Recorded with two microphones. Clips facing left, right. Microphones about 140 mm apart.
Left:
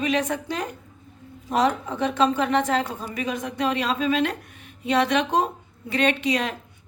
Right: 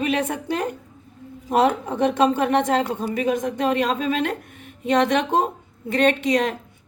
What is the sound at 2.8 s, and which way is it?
Speech, 25° right (ahead or behind).